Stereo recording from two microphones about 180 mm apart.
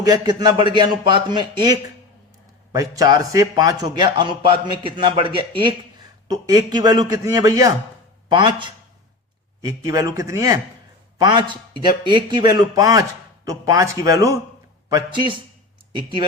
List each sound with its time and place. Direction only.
0.0 s a man's voice: 20° right (ahead or behind)